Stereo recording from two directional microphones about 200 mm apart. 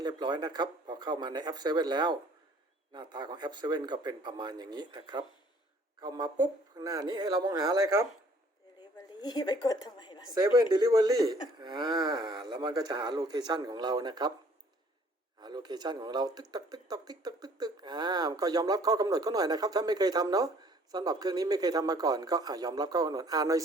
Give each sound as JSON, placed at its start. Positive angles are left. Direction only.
{"t": 0.0, "sound": "speech", "side_deg": -20}
{"t": 8.8, "sound": "a woman's voice", "side_deg": 20}
{"t": 10.3, "sound": "speech", "side_deg": -20}
{"t": 15.4, "sound": "speech", "side_deg": -20}